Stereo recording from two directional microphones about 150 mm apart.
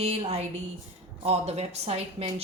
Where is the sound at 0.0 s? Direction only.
45° right (ahead or behind).